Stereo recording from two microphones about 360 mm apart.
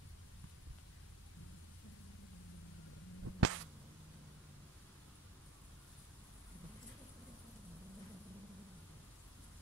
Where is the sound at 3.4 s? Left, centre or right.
Right.